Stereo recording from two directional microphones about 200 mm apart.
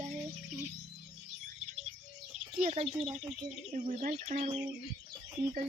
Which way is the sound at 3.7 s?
40° right (ahead or behind).